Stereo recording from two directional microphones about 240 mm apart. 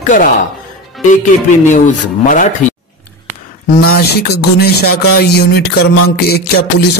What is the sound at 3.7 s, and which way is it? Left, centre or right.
Speech, left.